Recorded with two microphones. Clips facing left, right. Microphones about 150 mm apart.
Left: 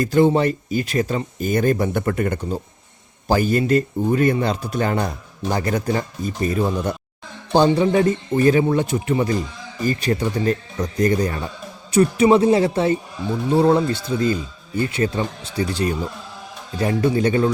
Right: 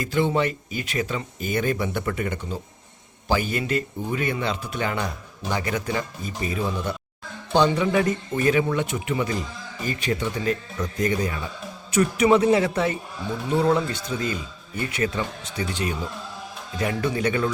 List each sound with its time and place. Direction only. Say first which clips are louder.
0.0 s speech: left 7 dB; 40° left (ahead or behind)
11.9 s speech: left 4 dB; 30° left (ahead or behind)